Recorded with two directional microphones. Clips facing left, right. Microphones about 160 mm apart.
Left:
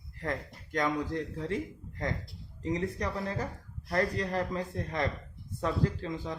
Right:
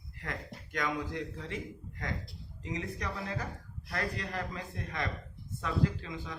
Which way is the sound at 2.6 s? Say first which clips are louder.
Left 6 dB; 40° left (ahead or behind).